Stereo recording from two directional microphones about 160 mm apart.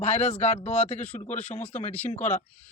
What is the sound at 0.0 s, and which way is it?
A man's voice, 45° left (ahead or behind).